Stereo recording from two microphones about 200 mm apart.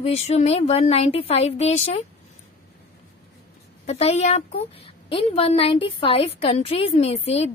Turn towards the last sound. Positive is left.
turn(degrees=30)  # may be behind; listen again after turning